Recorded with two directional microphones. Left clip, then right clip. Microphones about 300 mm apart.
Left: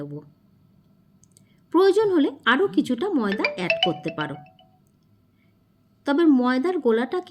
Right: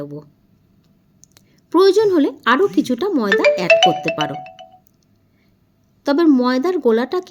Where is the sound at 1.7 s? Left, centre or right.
Centre.